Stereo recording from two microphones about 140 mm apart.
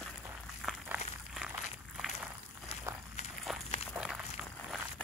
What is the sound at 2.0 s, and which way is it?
Walk, centre (ahead or behind).